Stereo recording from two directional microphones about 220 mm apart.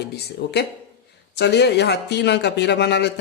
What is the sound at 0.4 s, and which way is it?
Speech, 50° left (ahead or behind).